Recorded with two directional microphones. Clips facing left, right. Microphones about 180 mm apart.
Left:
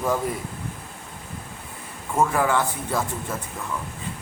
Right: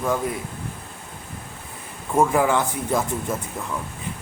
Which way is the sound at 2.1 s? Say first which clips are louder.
Right 2 dB; 15° right (ahead or behind).